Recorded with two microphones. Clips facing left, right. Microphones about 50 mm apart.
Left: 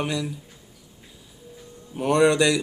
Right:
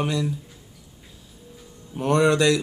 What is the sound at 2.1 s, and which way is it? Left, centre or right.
Speech, centre.